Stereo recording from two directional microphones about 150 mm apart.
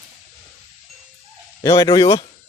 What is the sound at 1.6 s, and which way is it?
Speech, 20° left (ahead or behind).